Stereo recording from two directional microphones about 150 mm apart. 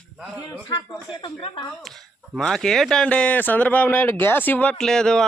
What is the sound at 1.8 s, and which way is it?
Speech, centre (ahead or behind).